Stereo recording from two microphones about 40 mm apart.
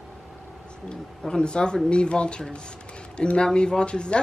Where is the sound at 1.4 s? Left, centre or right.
Left.